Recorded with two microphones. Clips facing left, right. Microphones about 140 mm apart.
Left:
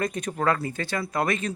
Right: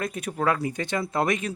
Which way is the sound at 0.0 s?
5° right (ahead or behind).